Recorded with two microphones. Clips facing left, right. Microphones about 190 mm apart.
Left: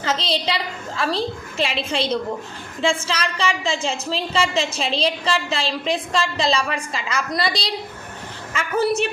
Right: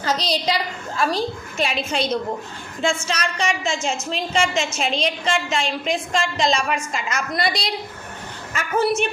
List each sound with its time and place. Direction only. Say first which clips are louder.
0.0 s a woman's voice: right 1 dB; 25° left (ahead or behind)